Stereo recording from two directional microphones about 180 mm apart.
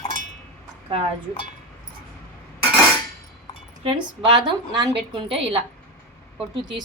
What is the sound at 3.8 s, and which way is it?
A woman's voice, 25° right (ahead or behind).